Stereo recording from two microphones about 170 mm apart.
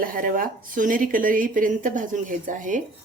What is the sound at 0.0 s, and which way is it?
Speech, 55° right (ahead or behind).